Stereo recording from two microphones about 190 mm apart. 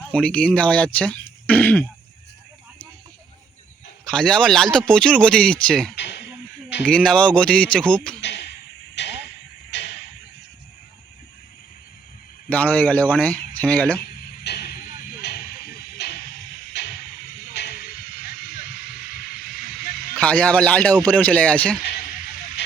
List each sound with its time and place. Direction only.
0.0 s speech: 5° left (ahead or behind)
4.0 s speech: 5° left (ahead or behind)
6.0 s speech: 65° left (ahead or behind)
6.8 s speech: 5° left (ahead or behind)
8.2 s a sound: 65° left (ahead or behind)
12.5 s speech: 10° left (ahead or behind)
14.4 s vehicle: 60° left (ahead or behind)
15.2 s a sound: 55° left (ahead or behind)
20.1 s speech: 5° left (ahead or behind)